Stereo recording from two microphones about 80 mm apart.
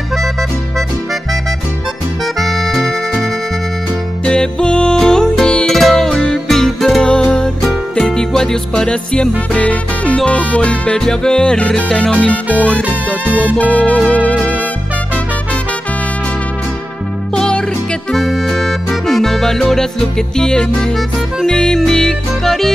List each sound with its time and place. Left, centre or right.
2.3 s music: centre
17.4 s music: centre